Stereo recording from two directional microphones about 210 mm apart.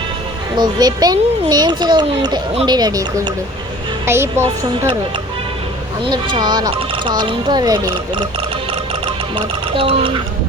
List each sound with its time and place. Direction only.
0.5 s a child's voice: 20° right (ahead or behind)
6.1 s a child's voice: 20° right (ahead or behind)